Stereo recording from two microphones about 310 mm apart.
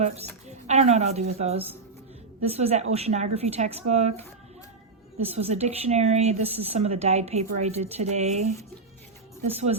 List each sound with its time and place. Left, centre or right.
0.0 s a woman's voice: right
5.4 s speech: right